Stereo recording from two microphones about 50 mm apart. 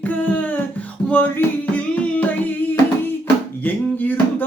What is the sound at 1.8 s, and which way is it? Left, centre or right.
Music, left.